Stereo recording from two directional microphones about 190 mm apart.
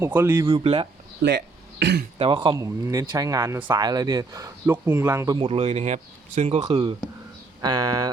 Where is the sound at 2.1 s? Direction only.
25° right (ahead or behind).